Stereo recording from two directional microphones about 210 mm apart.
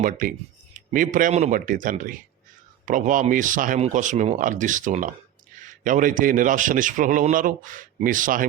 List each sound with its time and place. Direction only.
0.0 s a man's voice: 40° right (ahead or behind)